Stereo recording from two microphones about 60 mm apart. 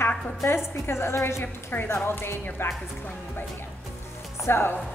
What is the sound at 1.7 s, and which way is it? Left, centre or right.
A woman's voice, left.